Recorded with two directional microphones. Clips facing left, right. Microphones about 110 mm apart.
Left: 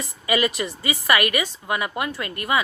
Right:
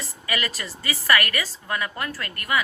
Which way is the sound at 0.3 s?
20° left (ahead or behind).